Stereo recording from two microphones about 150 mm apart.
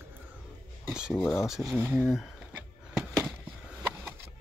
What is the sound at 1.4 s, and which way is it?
Speech, centre (ahead or behind).